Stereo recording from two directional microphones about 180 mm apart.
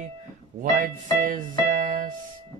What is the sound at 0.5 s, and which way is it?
Speech, 50° right (ahead or behind).